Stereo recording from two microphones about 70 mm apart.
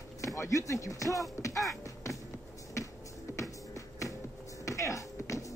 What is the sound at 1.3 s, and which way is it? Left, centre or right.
Music, left.